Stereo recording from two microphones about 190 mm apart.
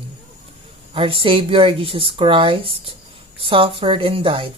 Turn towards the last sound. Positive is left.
turn(degrees=-25)  # may be behind; listen again after turning